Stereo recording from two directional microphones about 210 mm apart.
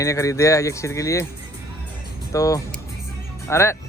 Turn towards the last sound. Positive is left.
turn(degrees=15)  # may be behind; listen again after turning